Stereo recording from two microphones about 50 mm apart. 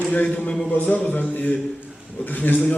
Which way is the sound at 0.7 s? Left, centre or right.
Left.